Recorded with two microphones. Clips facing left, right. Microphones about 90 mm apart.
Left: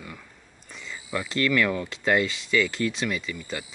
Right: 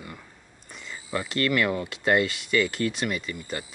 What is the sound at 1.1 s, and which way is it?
Speech, 5° right (ahead or behind).